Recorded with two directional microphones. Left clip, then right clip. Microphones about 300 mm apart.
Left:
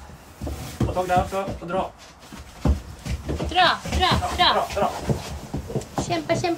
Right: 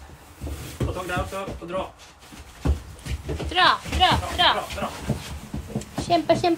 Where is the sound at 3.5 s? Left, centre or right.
Centre.